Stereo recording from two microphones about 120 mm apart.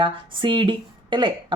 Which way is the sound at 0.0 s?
45° right (ahead or behind).